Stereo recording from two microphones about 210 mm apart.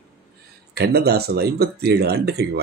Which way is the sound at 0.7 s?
50° right (ahead or behind).